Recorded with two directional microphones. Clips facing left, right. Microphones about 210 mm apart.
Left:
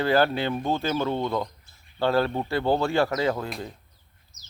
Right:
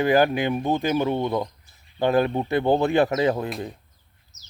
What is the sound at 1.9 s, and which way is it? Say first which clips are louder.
A man's voice: right 3 dB; 15° right (ahead or behind).